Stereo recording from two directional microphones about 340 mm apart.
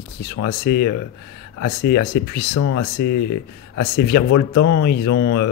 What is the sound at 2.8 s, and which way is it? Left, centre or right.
Speech, left.